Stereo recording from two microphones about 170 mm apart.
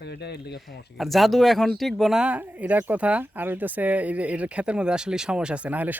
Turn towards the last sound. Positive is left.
turn(degrees=-10)  # may be behind; listen again after turning